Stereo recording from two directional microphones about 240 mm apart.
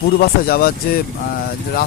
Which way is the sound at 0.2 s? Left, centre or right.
Left.